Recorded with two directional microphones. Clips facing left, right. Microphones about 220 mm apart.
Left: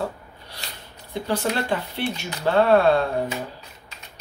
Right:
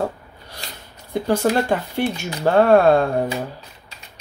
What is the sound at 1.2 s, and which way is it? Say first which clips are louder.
Speech: right 6 dB; 45° right (ahead or behind).